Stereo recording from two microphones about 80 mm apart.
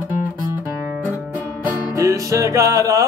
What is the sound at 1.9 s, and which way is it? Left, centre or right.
Music, right.